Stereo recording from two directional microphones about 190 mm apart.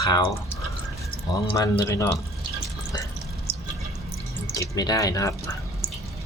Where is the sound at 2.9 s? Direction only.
20° left (ahead or behind).